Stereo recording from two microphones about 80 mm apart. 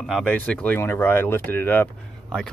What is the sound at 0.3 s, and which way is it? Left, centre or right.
Speech, centre.